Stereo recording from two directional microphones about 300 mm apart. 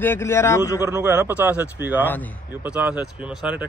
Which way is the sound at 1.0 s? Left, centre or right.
Centre.